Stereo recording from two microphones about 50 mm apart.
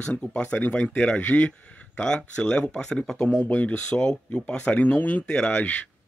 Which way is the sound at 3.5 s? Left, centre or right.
Left.